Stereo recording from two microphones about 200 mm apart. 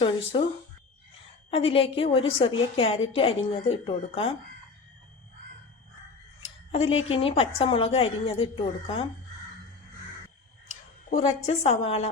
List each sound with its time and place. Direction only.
0.3 s a woman's voice: 25° left (ahead or behind)
6.7 s a woman's voice: 30° left (ahead or behind)
11.1 s a woman's voice: 35° left (ahead or behind)